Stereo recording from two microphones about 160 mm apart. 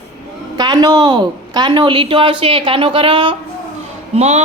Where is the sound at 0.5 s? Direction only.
25° right (ahead or behind).